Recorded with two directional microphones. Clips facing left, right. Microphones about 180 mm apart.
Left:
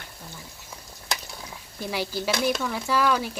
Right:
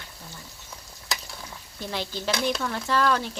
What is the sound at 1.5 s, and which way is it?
Speech, 10° left (ahead or behind).